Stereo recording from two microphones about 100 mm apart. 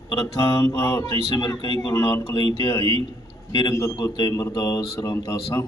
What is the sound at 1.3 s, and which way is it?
A man's voice, 45° left (ahead or behind).